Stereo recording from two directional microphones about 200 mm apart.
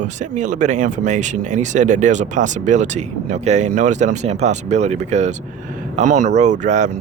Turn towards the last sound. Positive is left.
turn(degrees=-35)  # may be behind; listen again after turning